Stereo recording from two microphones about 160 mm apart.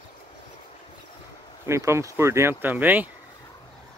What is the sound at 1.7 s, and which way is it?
Speech, 15° right (ahead or behind).